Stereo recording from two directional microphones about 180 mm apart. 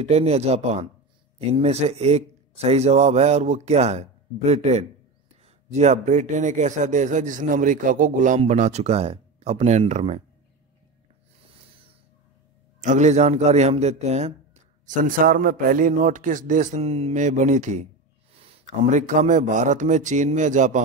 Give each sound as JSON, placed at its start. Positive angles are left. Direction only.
{"t": 0.1, "sound": "a man's voice", "side_deg": -35}
{"t": 12.8, "sound": "a man's voice", "side_deg": -40}
{"t": 14.9, "sound": "a man's voice", "side_deg": -50}